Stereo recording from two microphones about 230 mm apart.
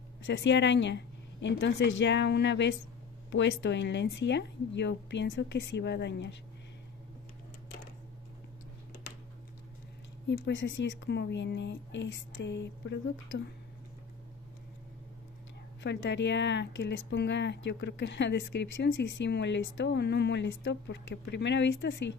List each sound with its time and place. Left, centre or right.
0.2 s speech: left
10.3 s speech: left
15.8 s speech: left